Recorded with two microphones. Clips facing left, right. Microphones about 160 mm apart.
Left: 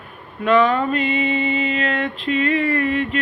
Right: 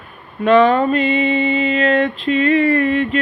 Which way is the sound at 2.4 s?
25° right (ahead or behind).